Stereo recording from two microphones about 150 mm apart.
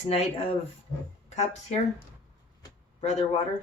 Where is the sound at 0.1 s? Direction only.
40° left (ahead or behind).